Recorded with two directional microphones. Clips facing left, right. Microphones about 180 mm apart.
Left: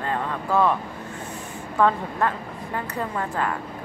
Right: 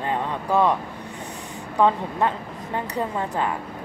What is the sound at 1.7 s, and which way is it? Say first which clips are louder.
A woman's voice: right 1 dB; 20° right (ahead or behind).